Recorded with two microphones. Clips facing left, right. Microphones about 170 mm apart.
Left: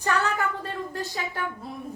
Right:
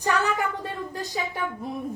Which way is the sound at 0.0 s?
15° right (ahead or behind).